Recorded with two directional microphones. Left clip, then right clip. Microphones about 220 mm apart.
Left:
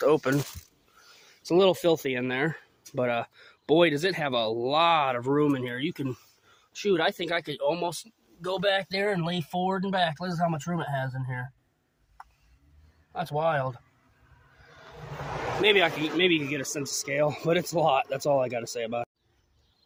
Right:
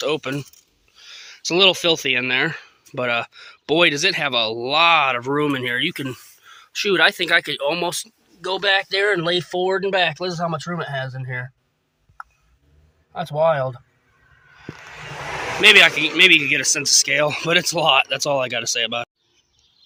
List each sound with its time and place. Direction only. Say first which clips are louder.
0.0 s speech: even; 10° left (ahead or behind); by 8.1 s 5° right (ahead or behind)
8.4 s speech: right 7 dB; 25° right (ahead or behind); by 11.4 s 45° right (ahead or behind)
13.3 s speech: right 9 dB; 40° right (ahead or behind)
15.6 s speech: right 12 dB; centre (ahead or behind)